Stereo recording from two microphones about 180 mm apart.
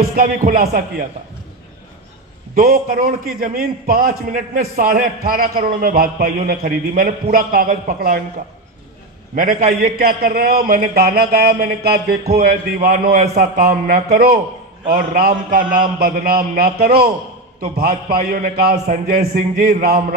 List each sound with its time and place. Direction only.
0.0 s speech: 55° right (ahead or behind)
2.5 s a man's voice: 55° right (ahead or behind)
9.3 s a man's voice: 50° right (ahead or behind)